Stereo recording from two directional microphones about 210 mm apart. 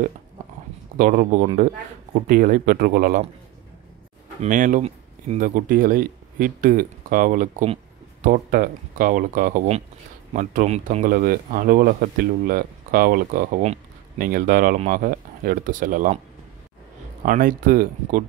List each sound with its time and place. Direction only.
0.9 s speech: 40° right (ahead or behind)
4.4 s speech: 40° right (ahead or behind)
17.2 s speech: 40° right (ahead or behind)